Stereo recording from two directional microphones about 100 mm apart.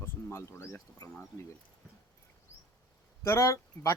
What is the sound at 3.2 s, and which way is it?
Speech, 30° left (ahead or behind).